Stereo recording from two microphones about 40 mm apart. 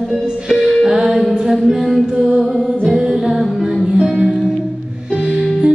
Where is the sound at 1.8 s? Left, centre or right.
Centre.